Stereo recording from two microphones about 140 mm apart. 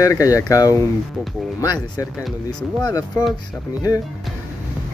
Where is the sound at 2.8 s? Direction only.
30° left (ahead or behind).